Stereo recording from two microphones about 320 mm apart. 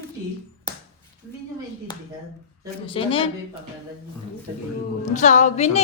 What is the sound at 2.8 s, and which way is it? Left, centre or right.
Speech, centre.